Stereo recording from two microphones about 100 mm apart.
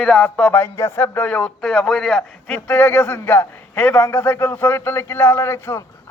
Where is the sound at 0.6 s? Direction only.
25° left (ahead or behind); by 2.6 s 5° left (ahead or behind).